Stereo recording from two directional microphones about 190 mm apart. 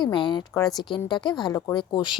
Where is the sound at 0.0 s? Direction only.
25° left (ahead or behind).